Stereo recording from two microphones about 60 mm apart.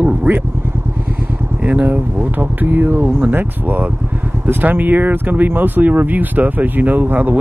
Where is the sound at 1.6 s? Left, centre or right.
Right.